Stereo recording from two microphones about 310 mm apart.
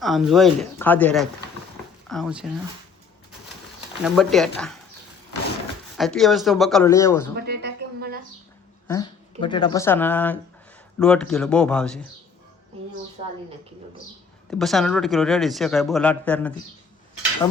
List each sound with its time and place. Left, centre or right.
0.0 s speech: centre
4.0 s speech: centre
6.0 s speech: centre
7.4 s music: right
9.4 s speech: centre
13.2 s a woman's voice: right
14.5 s speech: centre